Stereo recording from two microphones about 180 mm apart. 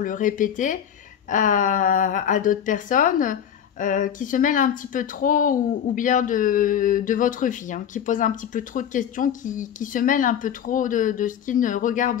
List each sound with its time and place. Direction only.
0.0 s speech: 45° left (ahead or behind)